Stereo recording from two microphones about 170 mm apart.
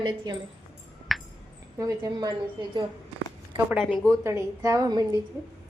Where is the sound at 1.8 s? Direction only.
20° right (ahead or behind).